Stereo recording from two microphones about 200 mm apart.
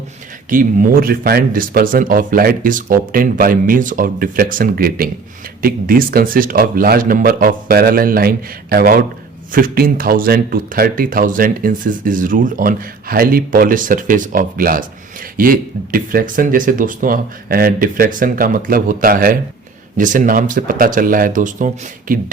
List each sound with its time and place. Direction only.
0.5 s speech: 45° right (ahead or behind)